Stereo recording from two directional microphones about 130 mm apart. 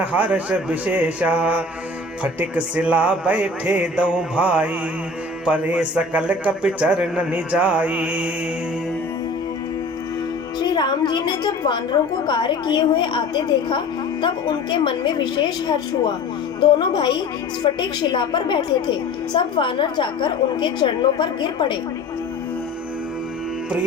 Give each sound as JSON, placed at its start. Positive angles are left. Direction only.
{"t": 0.0, "sound": "a man's voice", "side_deg": -10}
{"t": 10.6, "sound": "a woman's voice", "side_deg": 35}